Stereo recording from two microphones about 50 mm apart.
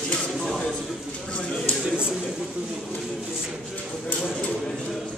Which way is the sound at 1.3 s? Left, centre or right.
Left.